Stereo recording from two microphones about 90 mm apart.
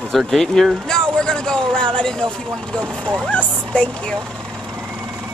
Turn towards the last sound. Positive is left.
turn(degrees=10)  # may be behind; listen again after turning